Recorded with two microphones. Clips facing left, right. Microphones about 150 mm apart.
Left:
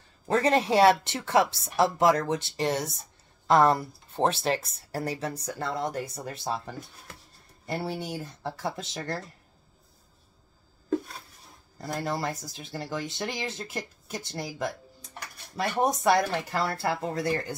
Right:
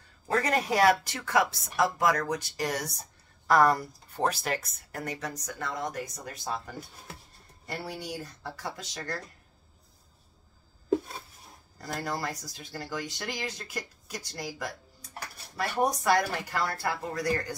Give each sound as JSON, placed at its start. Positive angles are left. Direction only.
{"t": 0.3, "sound": "speech", "side_deg": 25}
{"t": 11.8, "sound": "speech", "side_deg": 25}